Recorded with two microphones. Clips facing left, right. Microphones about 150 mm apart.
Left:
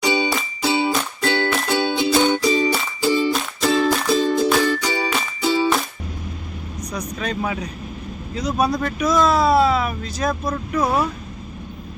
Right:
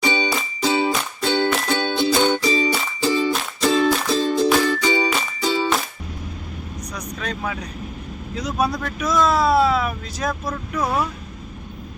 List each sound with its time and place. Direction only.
0.0 s music: 10° left (ahead or behind)
7.2 s speech: 5° left (ahead or behind)